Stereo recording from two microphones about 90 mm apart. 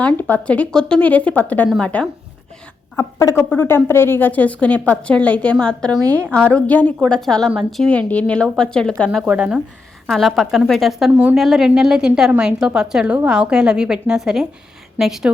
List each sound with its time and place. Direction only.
0.0 s a woman's voice: 20° left (ahead or behind)
2.9 s a woman's voice: 25° left (ahead or behind)
7.0 s a woman's voice: 5° left (ahead or behind)
9.2 s a woman's voice: 10° right (ahead or behind)
10.1 s speech: centre (ahead or behind)
11.1 s a woman's voice: 20° right (ahead or behind)
11.3 s a woman's voice: centre (ahead or behind)